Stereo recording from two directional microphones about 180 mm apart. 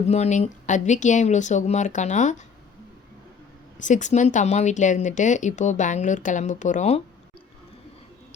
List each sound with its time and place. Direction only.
0.1 s speech: 40° left (ahead or behind)
3.8 s speech: 45° left (ahead or behind)